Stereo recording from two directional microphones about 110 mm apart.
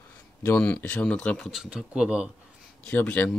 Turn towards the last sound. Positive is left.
turn(degrees=15)  # may be behind; listen again after turning